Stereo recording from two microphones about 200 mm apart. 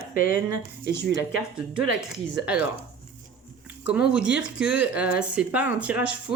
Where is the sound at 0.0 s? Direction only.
45° left (ahead or behind).